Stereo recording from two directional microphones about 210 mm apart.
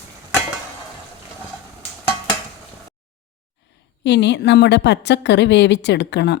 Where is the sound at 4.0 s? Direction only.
55° left (ahead or behind).